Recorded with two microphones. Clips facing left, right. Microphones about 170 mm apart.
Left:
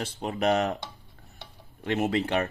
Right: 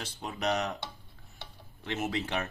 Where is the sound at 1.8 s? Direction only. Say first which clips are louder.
Left 7 dB; 60° left (ahead or behind).